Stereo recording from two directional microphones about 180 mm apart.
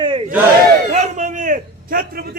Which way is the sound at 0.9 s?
45° right (ahead or behind).